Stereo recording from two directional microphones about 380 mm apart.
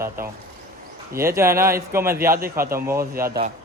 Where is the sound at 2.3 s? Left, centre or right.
Right.